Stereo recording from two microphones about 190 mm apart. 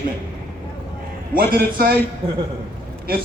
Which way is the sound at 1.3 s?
50° right (ahead or behind).